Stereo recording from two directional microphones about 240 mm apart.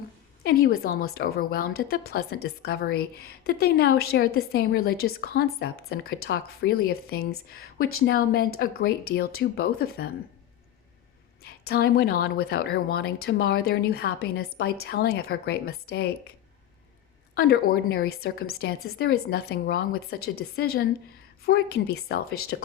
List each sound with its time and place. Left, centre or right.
0.4 s a woman's voice: left
11.4 s a woman's voice: left
17.3 s a woman's voice: left